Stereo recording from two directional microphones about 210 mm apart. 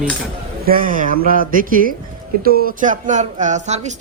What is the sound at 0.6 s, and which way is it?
Speech, 40° right (ahead or behind).